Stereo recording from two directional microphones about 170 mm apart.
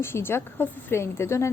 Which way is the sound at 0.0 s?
15° left (ahead or behind).